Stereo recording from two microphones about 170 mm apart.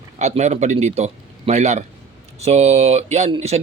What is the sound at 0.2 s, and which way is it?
Speech, 40° right (ahead or behind).